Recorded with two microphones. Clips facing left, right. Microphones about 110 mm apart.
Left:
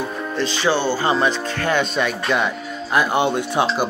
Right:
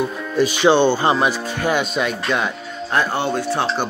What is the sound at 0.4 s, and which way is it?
Speech, 15° right (ahead or behind).